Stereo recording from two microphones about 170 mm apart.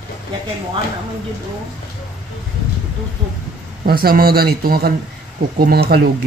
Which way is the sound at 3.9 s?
60° right (ahead or behind).